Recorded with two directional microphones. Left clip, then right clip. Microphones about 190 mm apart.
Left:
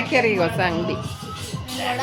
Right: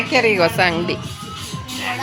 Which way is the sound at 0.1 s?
10° right (ahead or behind).